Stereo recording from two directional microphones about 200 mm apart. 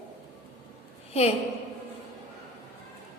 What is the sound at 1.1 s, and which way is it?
Speech, 30° left (ahead or behind).